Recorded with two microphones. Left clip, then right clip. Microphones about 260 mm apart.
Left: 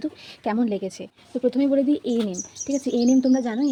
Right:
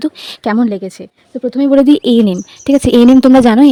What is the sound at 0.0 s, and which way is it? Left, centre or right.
Speech, right.